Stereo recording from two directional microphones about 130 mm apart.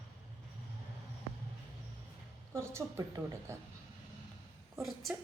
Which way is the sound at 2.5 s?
20° right (ahead or behind).